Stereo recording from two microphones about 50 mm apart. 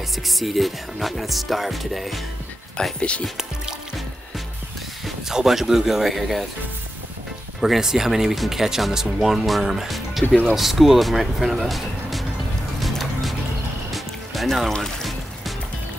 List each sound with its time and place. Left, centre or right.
0.3 s music: centre
3.0 s speech: left
5.0 s speech: centre
7.6 s speech: centre
12.8 s music: centre